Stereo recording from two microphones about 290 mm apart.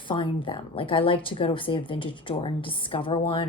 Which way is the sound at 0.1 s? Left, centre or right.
Centre.